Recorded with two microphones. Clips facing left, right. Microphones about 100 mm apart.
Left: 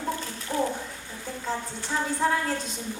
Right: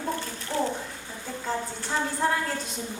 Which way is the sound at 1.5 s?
Centre (ahead or behind).